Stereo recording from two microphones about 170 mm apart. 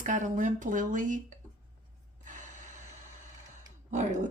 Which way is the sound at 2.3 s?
50° right (ahead or behind).